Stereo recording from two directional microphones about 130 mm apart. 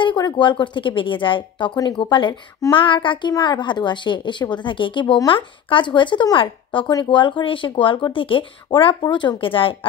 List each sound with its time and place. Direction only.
0.0 s speech: 35° left (ahead or behind)